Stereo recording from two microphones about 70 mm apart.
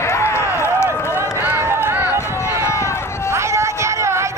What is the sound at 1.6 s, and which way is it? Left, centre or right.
Run, right.